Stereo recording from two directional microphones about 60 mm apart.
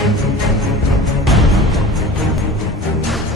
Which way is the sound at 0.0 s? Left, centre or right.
Centre.